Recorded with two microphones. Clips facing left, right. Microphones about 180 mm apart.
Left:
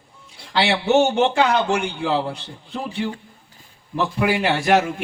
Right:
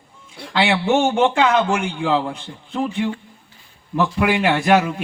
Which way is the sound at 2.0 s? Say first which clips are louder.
Right 2 dB; 50° right (ahead or behind).